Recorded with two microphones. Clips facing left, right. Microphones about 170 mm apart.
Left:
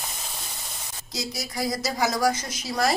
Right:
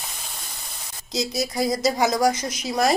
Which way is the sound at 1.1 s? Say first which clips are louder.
Right 8 dB; 20° right (ahead or behind).